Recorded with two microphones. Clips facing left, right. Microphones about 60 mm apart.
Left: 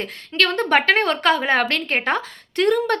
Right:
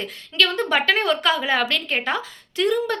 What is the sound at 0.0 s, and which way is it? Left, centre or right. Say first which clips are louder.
A woman's voice: left 1 dB; left.